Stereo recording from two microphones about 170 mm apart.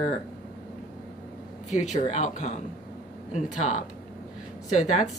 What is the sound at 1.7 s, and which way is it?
Speech, 45° left (ahead or behind).